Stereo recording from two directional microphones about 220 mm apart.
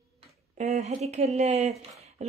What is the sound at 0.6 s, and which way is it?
A woman's voice, 30° right (ahead or behind).